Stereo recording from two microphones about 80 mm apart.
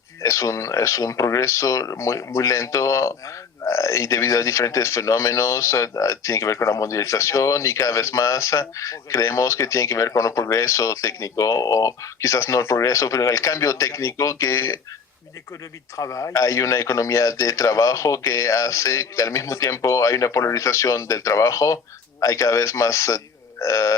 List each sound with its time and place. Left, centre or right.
0.2 s speech: left
16.0 s speech: left